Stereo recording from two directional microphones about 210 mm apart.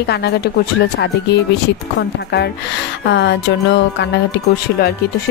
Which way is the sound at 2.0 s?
55° left (ahead or behind).